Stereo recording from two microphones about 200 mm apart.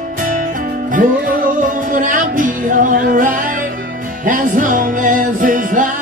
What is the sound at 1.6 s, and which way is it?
Music, 40° right (ahead or behind).